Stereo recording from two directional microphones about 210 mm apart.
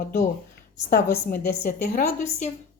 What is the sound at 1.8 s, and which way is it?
Speech, 35° left (ahead or behind).